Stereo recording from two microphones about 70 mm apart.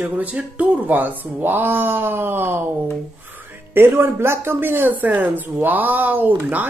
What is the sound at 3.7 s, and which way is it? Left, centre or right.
Speech, right.